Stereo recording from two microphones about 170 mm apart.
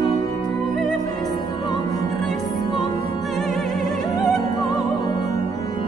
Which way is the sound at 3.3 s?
Centre (ahead or behind).